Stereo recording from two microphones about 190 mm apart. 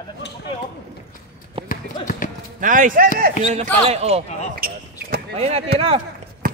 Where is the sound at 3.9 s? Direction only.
35° right (ahead or behind).